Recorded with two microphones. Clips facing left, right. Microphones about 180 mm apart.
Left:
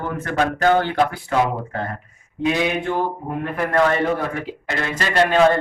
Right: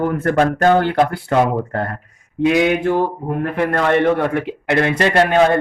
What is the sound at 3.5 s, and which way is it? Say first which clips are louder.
A man's voice: right 2 dB; 70° right (ahead or behind).